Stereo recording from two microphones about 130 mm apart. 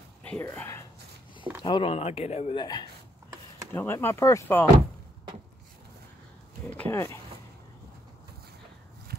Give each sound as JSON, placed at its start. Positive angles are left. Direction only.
{"t": 0.2, "sound": "speech", "side_deg": 10}
{"t": 1.6, "sound": "speech", "side_deg": 40}
{"t": 2.5, "sound": "speech", "side_deg": 35}
{"t": 3.7, "sound": "speech", "side_deg": 20}
{"t": 6.7, "sound": "speech", "side_deg": 15}